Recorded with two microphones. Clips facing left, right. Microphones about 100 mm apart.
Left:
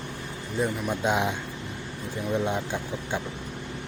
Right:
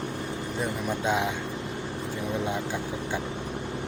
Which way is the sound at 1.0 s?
20° left (ahead or behind).